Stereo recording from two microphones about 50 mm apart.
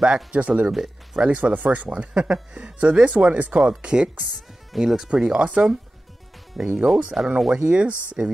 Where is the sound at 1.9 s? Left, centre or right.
Right.